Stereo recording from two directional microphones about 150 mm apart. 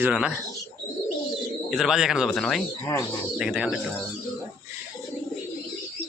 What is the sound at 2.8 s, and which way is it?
Speech, 20° left (ahead or behind).